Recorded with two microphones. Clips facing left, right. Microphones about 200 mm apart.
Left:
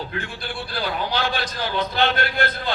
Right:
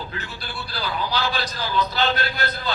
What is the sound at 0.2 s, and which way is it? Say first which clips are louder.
A man's voice: left 4 dB; 50° left (ahead or behind).